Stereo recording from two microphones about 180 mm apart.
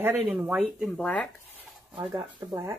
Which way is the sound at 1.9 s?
20° right (ahead or behind).